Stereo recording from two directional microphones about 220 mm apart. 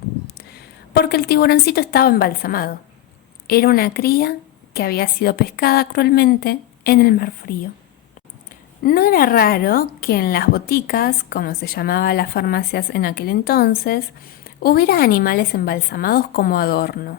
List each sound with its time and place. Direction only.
0.3 s a woman's voice: 45° left (ahead or behind)
8.8 s a woman's voice: 40° left (ahead or behind)